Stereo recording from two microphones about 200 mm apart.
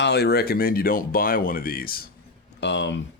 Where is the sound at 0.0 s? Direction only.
55° left (ahead or behind).